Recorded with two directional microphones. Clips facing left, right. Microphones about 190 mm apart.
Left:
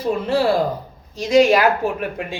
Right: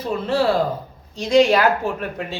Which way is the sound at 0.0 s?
10° left (ahead or behind).